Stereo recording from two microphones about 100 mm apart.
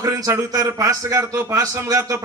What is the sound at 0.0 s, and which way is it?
A man's voice, 30° right (ahead or behind).